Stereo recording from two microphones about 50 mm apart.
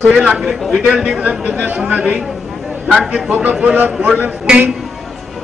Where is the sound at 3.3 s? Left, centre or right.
Right.